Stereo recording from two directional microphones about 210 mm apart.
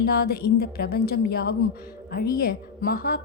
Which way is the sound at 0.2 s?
45° left (ahead or behind).